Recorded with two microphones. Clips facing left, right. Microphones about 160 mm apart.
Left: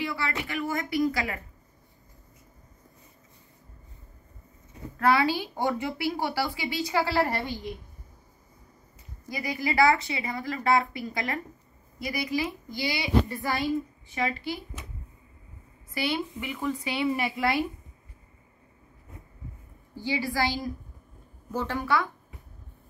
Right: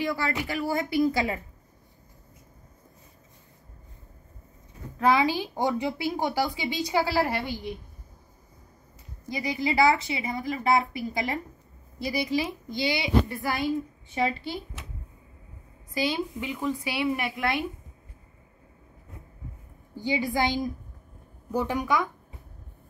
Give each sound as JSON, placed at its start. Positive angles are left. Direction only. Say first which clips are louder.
{"t": 0.0, "sound": "a woman's voice", "louder": "right 3 dB", "side_deg": -40}
{"t": 4.9, "sound": "a woman's voice", "louder": "right 1 dB", "side_deg": -15}
{"t": 9.3, "sound": "a woman's voice", "louder": "right 2 dB", "side_deg": -20}
{"t": 15.9, "sound": "a woman's voice", "louder": "right 2 dB", "side_deg": -15}
{"t": 20.0, "sound": "a woman's voice", "louder": "right 2 dB", "side_deg": -20}